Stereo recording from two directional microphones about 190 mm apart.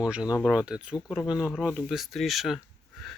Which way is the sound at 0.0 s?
5° right (ahead or behind).